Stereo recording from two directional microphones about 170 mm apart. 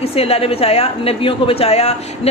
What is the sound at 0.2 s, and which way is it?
A woman's voice, 35° left (ahead or behind).